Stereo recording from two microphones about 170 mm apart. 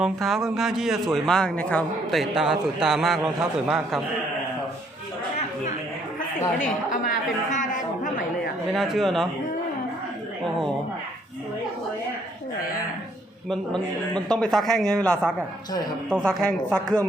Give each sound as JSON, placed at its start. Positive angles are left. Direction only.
{"t": 0.0, "sound": "a man's voice", "side_deg": 0}
{"t": 6.6, "sound": "a woman's voice", "side_deg": 50}
{"t": 8.7, "sound": "a man's voice", "side_deg": 0}
{"t": 14.1, "sound": "a man's voice", "side_deg": 5}